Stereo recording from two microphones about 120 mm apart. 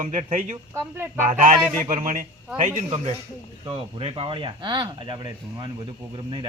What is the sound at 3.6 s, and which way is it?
A man's voice, 50° right (ahead or behind).